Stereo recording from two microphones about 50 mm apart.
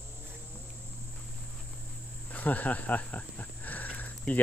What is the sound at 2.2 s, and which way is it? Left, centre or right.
Cricket, left.